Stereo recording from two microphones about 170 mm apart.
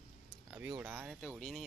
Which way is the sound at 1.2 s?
5° left (ahead or behind).